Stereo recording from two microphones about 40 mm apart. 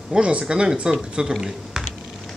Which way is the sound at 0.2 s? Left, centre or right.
Right.